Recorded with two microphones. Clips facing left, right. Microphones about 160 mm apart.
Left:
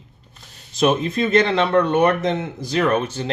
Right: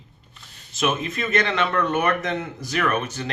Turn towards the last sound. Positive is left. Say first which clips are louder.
# left 5 dB
turn(degrees=30)  # may be behind; listen again after turning